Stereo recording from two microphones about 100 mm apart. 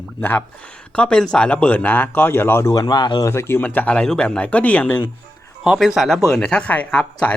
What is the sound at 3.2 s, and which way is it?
Speech, 25° left (ahead or behind).